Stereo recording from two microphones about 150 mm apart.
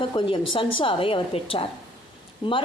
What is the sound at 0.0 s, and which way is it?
Speech, 35° left (ahead or behind).